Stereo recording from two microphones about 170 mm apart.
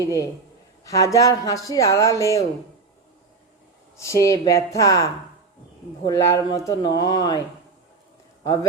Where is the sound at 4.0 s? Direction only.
20° left (ahead or behind).